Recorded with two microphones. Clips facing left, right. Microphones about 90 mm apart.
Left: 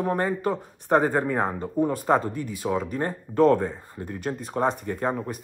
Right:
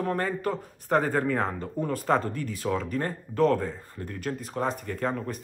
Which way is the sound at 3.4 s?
35° left (ahead or behind).